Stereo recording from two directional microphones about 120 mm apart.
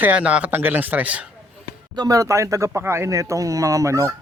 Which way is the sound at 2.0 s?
30° right (ahead or behind).